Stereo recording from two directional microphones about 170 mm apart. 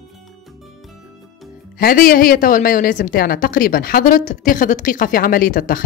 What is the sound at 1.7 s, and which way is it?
A woman's voice, 60° left (ahead or behind).